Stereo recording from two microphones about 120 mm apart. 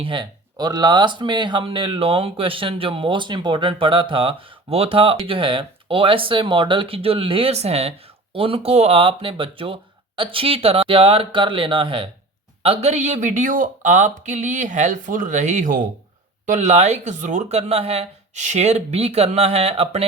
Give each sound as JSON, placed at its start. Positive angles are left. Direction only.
{"t": 0.0, "sound": "speech", "side_deg": -40}
{"t": 12.6, "sound": "speech", "side_deg": -60}
{"t": 16.5, "sound": "speech", "side_deg": -75}
{"t": 17.6, "sound": "speech", "side_deg": -55}